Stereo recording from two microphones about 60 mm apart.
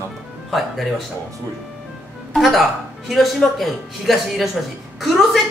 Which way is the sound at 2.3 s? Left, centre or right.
Centre.